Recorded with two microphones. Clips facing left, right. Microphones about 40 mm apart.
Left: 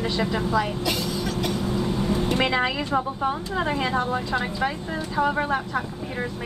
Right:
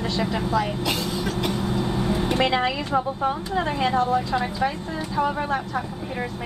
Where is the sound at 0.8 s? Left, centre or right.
Right.